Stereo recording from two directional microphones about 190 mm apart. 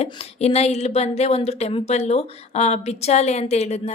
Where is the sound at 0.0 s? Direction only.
35° left (ahead or behind).